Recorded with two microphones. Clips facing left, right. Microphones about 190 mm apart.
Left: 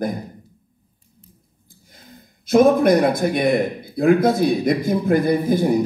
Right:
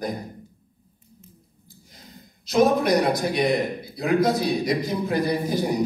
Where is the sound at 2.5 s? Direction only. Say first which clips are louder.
Left 5 dB; 55° left (ahead or behind).